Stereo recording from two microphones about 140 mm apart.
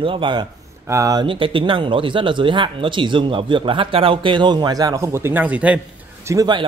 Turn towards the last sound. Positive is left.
turn(degrees=-25)  # may be behind; listen again after turning